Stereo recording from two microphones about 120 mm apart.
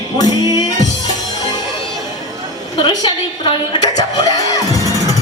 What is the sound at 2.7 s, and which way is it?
A woman's voice, 40° left (ahead or behind).